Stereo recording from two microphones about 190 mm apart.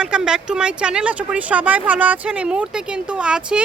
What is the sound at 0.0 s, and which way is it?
Speech, 5° right (ahead or behind).